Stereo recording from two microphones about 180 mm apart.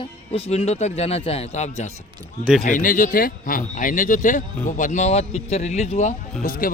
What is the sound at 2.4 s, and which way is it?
Speech, 5° right (ahead or behind).